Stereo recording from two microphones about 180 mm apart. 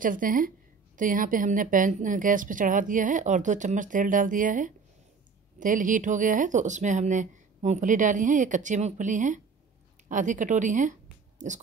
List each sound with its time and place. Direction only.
0.0 s a woman's voice: 50° right (ahead or behind)